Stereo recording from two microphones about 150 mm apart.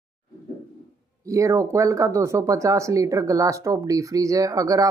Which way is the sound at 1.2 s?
20° right (ahead or behind).